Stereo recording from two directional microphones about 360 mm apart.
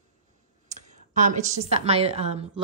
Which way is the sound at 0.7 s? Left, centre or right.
Centre.